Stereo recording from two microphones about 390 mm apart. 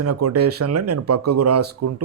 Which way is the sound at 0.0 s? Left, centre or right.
Right.